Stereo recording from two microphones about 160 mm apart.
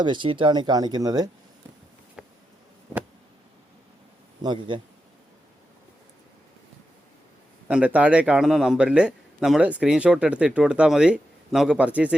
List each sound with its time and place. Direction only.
0.0 s speech: 30° right (ahead or behind)
2.2 s a sound: 5° right (ahead or behind)
4.4 s speech: 30° right (ahead or behind)
7.7 s a man's voice: 10° right (ahead or behind)